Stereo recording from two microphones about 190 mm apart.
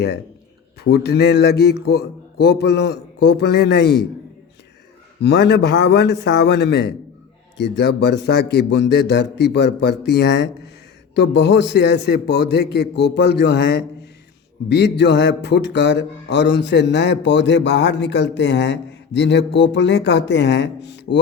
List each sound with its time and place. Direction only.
0.9 s speech: 60° left (ahead or behind)
5.2 s speech: 60° left (ahead or behind)